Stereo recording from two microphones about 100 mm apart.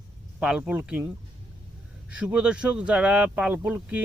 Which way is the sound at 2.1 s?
10° right (ahead or behind).